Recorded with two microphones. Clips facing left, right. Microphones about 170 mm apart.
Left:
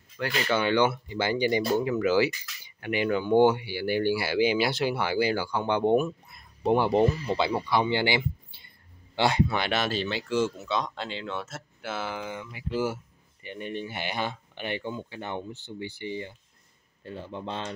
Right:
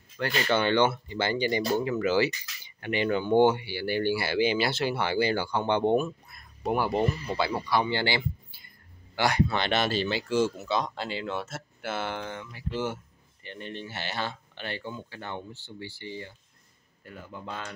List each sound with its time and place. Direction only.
0.2 s speech: 5° left (ahead or behind)
8.5 s a sound: 25° left (ahead or behind)
9.5 s speech: 5° left (ahead or behind); by 17.7 s 25° left (ahead or behind)